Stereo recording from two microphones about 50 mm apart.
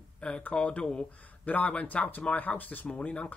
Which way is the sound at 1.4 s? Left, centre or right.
Left.